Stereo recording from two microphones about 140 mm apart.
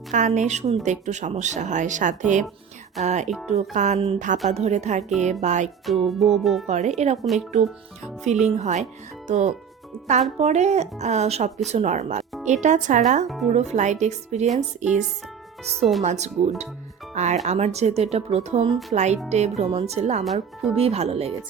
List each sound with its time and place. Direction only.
0.1 s speech: 60° right (ahead or behind)
3.2 s music: centre (ahead or behind)
3.5 s speech: 55° right (ahead or behind)
5.8 s music: centre (ahead or behind)
6.7 s speech: 55° right (ahead or behind)
8.4 s speech: 55° right (ahead or behind)
13.2 s music: centre (ahead or behind)
13.5 s speech: 55° right (ahead or behind)
15.8 s music: centre (ahead or behind)
16.0 s speech: 55° right (ahead or behind)
18.7 s music: centre (ahead or behind)
18.9 s speech: 55° right (ahead or behind)
20.2 s music: centre (ahead or behind)
20.7 s speech: 45° right (ahead or behind)